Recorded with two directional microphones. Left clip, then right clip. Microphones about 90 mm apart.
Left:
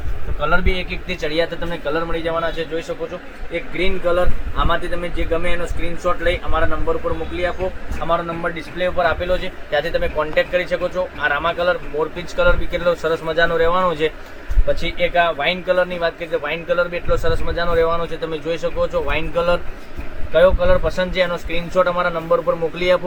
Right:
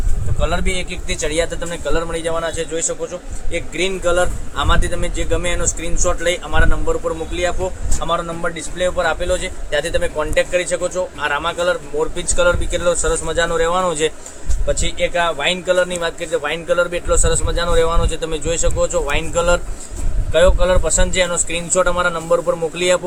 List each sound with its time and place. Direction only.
0.3 s a man's voice: 45° right (ahead or behind)
3.5 s speech: 25° right (ahead or behind)
6.1 s speech: 40° right (ahead or behind)
8.0 s a man's voice: 35° right (ahead or behind); by 14.1 s 50° right (ahead or behind)
14.7 s a man's voice: 30° right (ahead or behind); by 19.6 s 50° right (ahead or behind)
20.3 s a man's voice: 30° right (ahead or behind); by 23.0 s 50° right (ahead or behind)